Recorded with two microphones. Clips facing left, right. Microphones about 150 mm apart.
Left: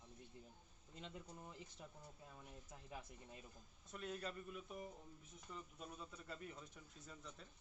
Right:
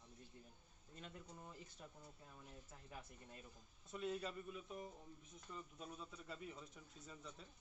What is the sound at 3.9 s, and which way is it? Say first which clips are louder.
Speech: right 3 dB; centre (ahead or behind).